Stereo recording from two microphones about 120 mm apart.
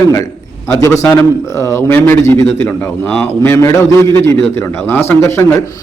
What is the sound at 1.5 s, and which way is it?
A man's voice, 25° left (ahead or behind).